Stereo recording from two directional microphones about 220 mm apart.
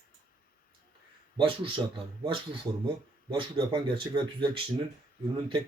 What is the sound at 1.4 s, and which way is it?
Speech, 25° right (ahead or behind).